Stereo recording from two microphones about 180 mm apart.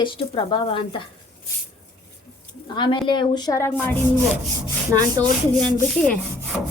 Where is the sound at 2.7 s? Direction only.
25° left (ahead or behind).